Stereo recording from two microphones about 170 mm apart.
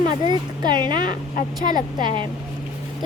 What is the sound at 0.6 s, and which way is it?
Speech, 25° right (ahead or behind).